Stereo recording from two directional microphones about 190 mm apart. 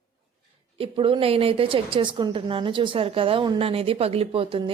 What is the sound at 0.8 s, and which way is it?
A woman's voice, 30° right (ahead or behind).